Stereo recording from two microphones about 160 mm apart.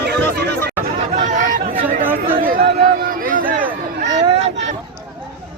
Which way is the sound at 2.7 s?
65° right (ahead or behind).